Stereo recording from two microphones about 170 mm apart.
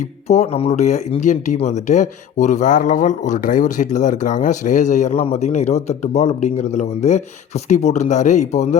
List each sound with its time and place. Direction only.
0.0 s speech: 40° left (ahead or behind)